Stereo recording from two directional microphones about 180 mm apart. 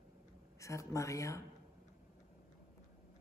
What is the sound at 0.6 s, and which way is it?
Speech, 15° left (ahead or behind).